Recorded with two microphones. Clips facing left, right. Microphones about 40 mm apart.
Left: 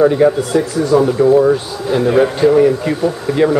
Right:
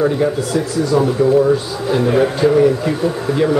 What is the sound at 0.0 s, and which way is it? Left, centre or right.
A man's voice, centre.